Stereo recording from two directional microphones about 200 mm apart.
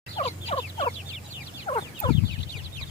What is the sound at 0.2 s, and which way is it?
Fowl, 30° left (ahead or behind).